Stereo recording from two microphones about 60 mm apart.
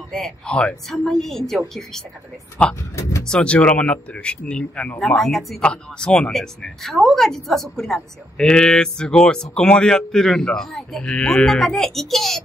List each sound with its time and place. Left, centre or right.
0.5 s a man's voice: centre
0.8 s a woman's voice: centre
2.6 s a man's voice: left
3.0 s speech: left
3.3 s a man's voice: centre
5.0 s speech: centre